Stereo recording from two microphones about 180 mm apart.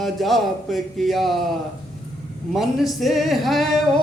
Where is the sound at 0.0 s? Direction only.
Centre (ahead or behind).